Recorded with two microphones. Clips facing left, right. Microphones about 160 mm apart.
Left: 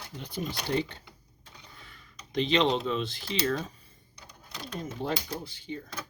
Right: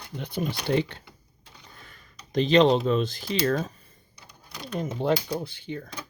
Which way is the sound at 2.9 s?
45° right (ahead or behind).